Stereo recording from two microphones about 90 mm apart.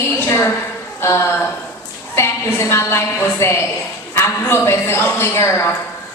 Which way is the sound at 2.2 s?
30° left (ahead or behind).